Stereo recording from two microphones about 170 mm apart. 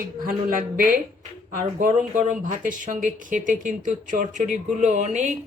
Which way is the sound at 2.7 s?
50° right (ahead or behind).